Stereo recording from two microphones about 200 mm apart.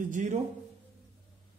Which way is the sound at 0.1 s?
35° right (ahead or behind).